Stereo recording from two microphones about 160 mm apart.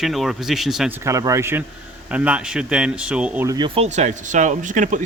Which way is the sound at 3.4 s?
25° right (ahead or behind).